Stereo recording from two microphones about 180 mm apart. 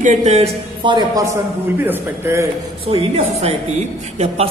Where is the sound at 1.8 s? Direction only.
10° right (ahead or behind).